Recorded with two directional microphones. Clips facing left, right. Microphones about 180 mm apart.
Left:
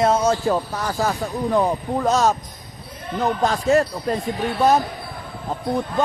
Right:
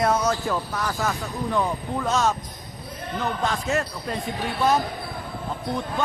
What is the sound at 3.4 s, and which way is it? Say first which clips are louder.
Speech: left 10 dB; 35° left (ahead or behind).